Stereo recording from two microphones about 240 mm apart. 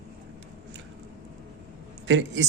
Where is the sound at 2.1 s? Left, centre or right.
Right.